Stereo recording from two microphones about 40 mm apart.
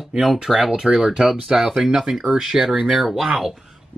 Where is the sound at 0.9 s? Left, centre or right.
Centre.